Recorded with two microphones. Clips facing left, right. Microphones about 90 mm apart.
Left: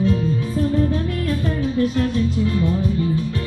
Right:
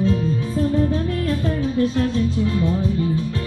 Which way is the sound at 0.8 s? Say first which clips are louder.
Even; 25° right (ahead or behind).